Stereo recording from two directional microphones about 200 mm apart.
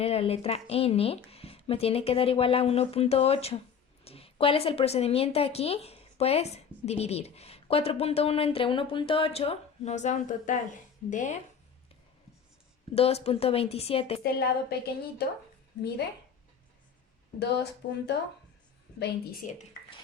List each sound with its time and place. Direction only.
0.0 s a woman's voice: 30° left (ahead or behind)
12.9 s speech: 30° left (ahead or behind)
14.3 s a woman's voice: 50° left (ahead or behind)
17.4 s a woman's voice: 55° left (ahead or behind)
19.5 s a sound: 35° left (ahead or behind)